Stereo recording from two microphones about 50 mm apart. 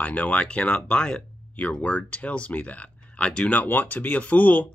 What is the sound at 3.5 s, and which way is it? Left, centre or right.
Speech, left.